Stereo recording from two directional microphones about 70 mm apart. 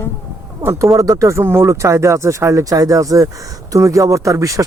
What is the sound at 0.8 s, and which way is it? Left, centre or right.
Speech, right.